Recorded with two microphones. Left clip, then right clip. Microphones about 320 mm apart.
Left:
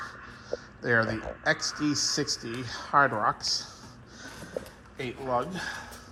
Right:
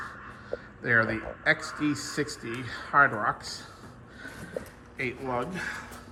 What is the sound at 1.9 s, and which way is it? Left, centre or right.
Speech, left.